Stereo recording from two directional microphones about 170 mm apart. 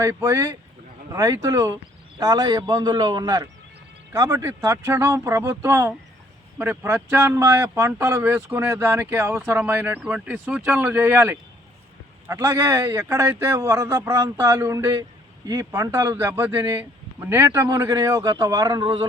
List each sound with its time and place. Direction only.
0.0 s a man's voice: 20° right (ahead or behind)